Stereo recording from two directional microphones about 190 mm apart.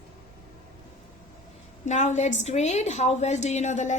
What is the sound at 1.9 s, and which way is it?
A woman's voice, 40° left (ahead or behind).